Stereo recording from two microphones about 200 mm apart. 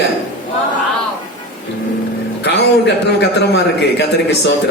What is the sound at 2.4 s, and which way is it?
A man's voice, 60° left (ahead or behind).